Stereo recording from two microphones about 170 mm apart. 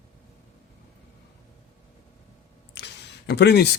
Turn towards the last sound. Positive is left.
turn(degrees=75)  # may be behind; listen again after turning